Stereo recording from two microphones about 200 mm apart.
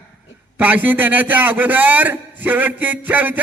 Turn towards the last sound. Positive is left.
turn(degrees=-10)  # may be behind; listen again after turning